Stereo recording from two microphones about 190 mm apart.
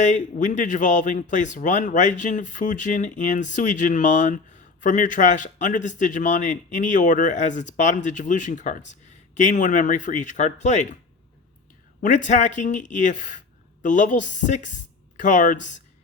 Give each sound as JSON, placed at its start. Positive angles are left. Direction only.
{"t": 0.0, "sound": "speech", "side_deg": 40}
{"t": 12.0, "sound": "speech", "side_deg": 40}